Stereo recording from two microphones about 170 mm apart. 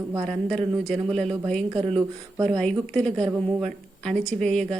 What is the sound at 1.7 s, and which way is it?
Speech, 35° right (ahead or behind).